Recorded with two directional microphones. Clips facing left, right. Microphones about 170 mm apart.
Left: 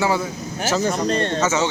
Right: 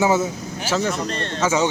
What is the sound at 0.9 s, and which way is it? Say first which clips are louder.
Speech: left 5 dB; 35° left (ahead or behind).